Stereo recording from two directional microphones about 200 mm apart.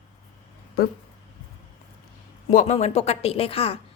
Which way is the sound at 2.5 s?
35° left (ahead or behind).